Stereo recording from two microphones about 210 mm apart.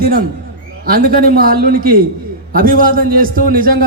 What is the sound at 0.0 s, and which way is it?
A man's voice, 45° right (ahead or behind).